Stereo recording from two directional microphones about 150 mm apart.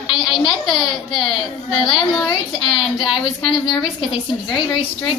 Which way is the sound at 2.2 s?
35° left (ahead or behind).